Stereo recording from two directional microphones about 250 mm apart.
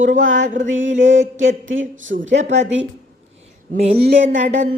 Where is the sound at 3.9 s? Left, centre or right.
Right.